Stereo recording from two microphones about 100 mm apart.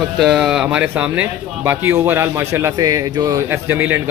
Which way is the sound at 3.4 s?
25° right (ahead or behind).